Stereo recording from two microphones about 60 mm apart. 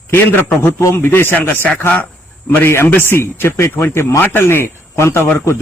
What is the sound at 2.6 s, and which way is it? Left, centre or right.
A man's voice, left.